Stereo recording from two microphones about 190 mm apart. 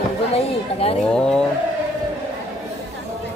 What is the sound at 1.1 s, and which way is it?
Bird, 5° left (ahead or behind).